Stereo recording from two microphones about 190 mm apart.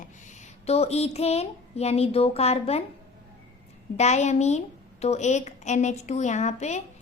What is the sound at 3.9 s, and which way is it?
A woman's voice, 35° left (ahead or behind).